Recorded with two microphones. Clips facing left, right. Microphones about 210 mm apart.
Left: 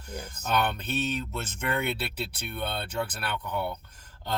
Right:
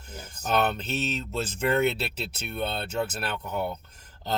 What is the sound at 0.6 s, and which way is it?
Speech, 25° right (ahead or behind).